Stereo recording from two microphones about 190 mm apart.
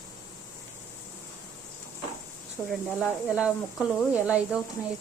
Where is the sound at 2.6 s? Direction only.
10° left (ahead or behind).